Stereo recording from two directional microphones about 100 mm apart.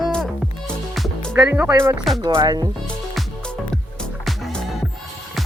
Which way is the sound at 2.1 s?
Centre (ahead or behind).